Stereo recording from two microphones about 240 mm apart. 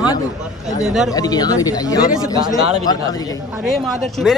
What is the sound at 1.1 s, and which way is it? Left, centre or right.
Speech, centre.